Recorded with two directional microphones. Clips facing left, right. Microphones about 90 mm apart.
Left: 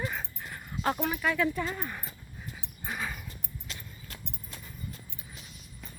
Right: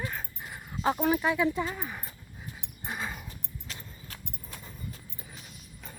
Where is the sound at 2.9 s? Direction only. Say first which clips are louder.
Even; 20° right (ahead or behind).